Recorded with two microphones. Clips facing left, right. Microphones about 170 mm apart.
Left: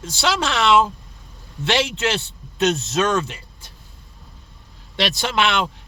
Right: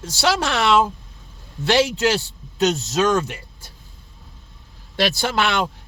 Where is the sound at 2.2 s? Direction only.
Centre (ahead or behind).